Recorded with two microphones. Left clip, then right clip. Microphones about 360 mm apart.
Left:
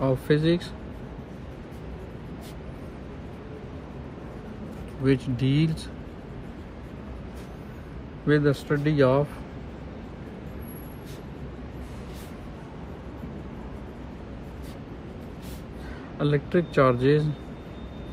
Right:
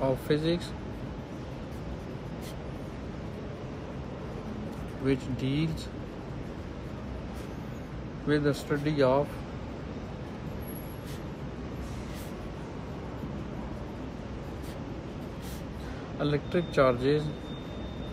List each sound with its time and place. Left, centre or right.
0.3 s speech: left
5.0 s speech: left
8.3 s speech: centre
16.2 s speech: centre